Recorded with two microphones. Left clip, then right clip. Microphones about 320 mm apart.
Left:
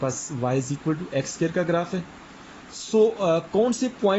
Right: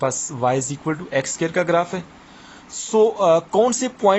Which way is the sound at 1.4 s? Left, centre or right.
Right.